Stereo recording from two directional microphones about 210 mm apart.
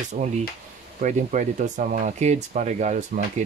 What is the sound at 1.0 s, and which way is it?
Speech, 35° right (ahead or behind).